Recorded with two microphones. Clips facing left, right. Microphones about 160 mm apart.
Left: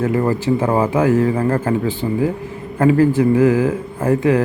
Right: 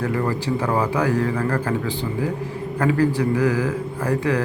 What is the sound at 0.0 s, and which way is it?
Mantra, 20° left (ahead or behind).